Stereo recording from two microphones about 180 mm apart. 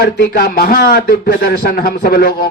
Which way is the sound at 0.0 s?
60° left (ahead or behind).